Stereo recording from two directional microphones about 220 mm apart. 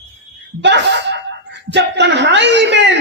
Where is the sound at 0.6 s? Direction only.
50° right (ahead or behind).